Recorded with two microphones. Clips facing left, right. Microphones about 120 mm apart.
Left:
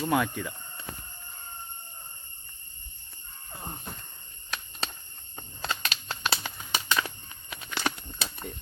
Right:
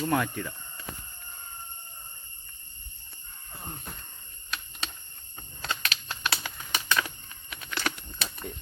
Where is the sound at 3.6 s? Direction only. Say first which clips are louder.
Left 1 dB; 20° left (ahead or behind).